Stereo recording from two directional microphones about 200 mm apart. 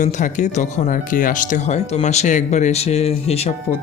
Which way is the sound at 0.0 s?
35° left (ahead or behind).